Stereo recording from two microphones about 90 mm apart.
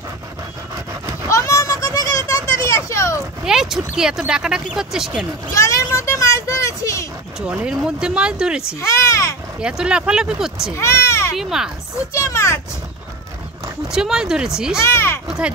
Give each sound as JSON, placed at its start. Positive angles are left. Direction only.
{"t": 1.3, "sound": "a sound", "side_deg": 35}
{"t": 3.4, "sound": "speech", "side_deg": -5}
{"t": 5.5, "sound": "a sound", "side_deg": 35}
{"t": 7.3, "sound": "speech", "side_deg": -10}
{"t": 8.6, "sound": "speech", "side_deg": 35}
{"t": 9.6, "sound": "speech", "side_deg": -10}
{"t": 10.8, "sound": "speech", "side_deg": 30}
{"t": 11.3, "sound": "speech", "side_deg": -5}
{"t": 12.1, "sound": "a child's voice", "side_deg": 35}
{"t": 13.9, "sound": "speech", "side_deg": -5}
{"t": 14.8, "sound": "speech", "side_deg": 30}
{"t": 15.2, "sound": "a sound", "side_deg": -10}